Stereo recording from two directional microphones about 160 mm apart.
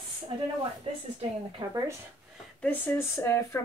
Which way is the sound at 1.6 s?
30° right (ahead or behind).